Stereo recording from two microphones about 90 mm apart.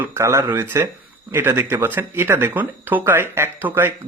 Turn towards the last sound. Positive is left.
turn(degrees=-25)  # may be behind; listen again after turning